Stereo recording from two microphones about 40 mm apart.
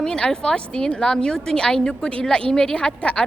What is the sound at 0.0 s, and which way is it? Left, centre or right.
A woman's voice, centre.